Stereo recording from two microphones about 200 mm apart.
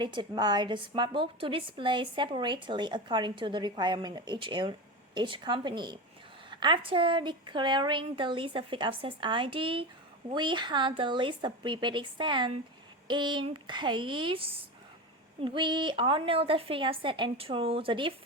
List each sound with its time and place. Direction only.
0.0 s a woman's voice: 20° right (ahead or behind)